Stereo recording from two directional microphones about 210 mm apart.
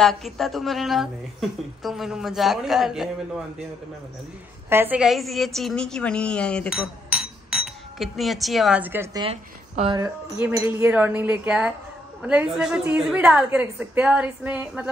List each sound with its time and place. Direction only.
0.0 s a woman's voice: centre (ahead or behind)
4.6 s a woman's voice: 10° right (ahead or behind)
9.2 s a woman's voice: 25° right (ahead or behind)
10.4 s a woman's voice: 10° right (ahead or behind)